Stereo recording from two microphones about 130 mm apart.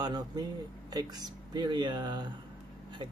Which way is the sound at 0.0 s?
30° right (ahead or behind).